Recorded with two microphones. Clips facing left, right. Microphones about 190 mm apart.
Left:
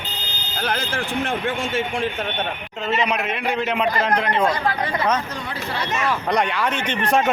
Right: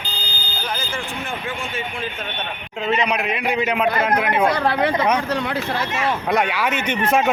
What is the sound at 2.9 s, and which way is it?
A man's voice, centre (ahead or behind).